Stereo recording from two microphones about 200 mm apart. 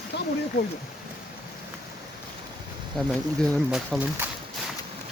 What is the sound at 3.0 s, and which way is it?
Speech, 5° left (ahead or behind).